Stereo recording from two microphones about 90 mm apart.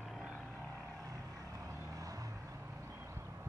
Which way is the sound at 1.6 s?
40° right (ahead or behind).